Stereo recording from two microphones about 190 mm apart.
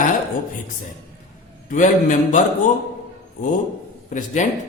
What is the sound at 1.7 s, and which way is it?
Speech, 40° left (ahead or behind).